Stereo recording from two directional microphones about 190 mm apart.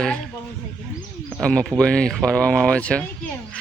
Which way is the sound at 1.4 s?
5° left (ahead or behind).